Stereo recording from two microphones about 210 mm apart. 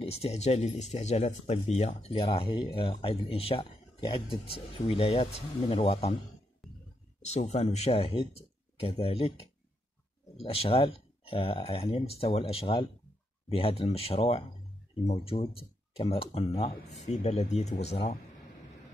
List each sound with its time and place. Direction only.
0.0 s speech: 30° left (ahead or behind)
6.6 s a sound: centre (ahead or behind)
7.2 s speech: 30° left (ahead or behind)